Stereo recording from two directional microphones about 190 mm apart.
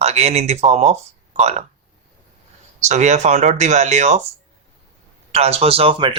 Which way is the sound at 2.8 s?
40° right (ahead or behind).